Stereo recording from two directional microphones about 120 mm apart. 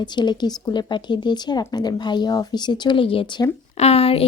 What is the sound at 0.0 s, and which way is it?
A woman's voice, 40° left (ahead or behind).